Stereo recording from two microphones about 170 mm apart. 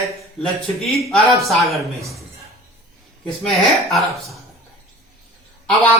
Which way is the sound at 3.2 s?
Centre (ahead or behind).